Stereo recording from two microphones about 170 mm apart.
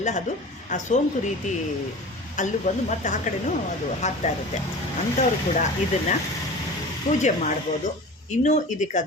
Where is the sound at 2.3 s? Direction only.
45° left (ahead or behind).